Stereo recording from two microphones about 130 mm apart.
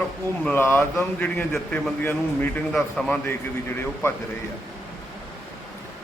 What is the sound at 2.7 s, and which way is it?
Speech, centre (ahead or behind).